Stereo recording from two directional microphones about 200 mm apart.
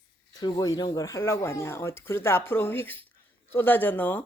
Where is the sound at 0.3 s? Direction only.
20° left (ahead or behind).